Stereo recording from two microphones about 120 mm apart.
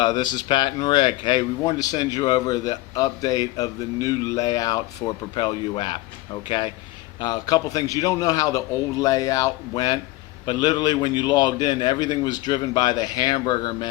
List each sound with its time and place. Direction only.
0.0 s speech: 35° left (ahead or behind)
7.2 s speech: 35° left (ahead or behind)